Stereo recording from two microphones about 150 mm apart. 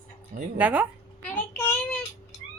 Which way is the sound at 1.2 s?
15° left (ahead or behind).